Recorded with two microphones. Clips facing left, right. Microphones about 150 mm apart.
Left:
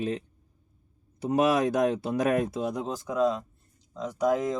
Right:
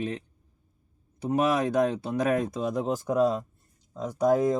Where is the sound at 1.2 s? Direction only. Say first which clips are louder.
Left 1 dB; 10° left (ahead or behind).